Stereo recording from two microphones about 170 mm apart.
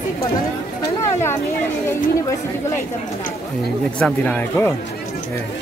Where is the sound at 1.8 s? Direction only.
15° left (ahead or behind).